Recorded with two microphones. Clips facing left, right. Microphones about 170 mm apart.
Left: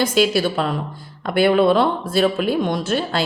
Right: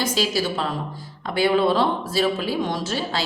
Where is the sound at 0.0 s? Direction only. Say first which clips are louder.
Left 6 dB; 60° left (ahead or behind).